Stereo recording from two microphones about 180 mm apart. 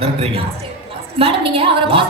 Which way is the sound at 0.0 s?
30° right (ahead or behind).